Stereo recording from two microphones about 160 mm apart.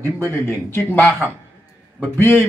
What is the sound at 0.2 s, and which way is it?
Speech, 15° left (ahead or behind).